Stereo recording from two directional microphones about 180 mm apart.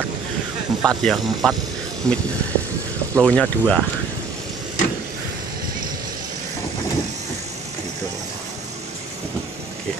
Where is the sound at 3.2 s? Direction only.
5° left (ahead or behind).